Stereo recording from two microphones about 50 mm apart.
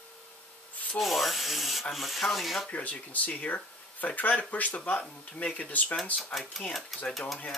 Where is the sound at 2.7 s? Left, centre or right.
Left.